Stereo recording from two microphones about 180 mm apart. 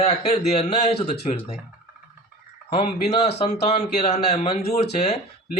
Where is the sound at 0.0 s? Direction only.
35° left (ahead or behind).